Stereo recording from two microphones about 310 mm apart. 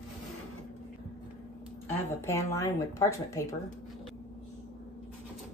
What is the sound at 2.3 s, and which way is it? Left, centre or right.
A woman's voice, centre.